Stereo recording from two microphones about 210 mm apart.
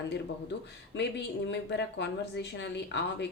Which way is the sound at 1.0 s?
55° left (ahead or behind).